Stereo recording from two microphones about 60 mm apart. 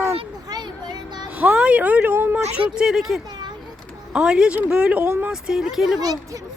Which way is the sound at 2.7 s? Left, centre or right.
Centre.